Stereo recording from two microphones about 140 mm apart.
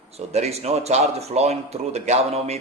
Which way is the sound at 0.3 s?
50° right (ahead or behind).